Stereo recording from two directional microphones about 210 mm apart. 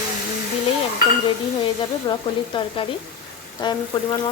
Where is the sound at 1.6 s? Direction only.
20° left (ahead or behind).